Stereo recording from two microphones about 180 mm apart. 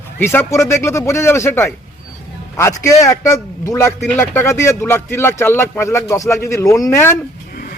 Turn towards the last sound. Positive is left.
turn(degrees=15)  # may be behind; listen again after turning